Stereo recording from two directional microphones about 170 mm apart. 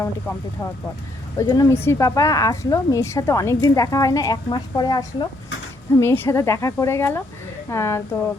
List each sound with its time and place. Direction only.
0.0 s a woman's voice: 15° left (ahead or behind)